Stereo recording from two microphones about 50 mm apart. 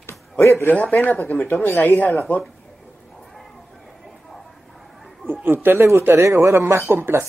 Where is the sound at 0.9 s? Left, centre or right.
Left.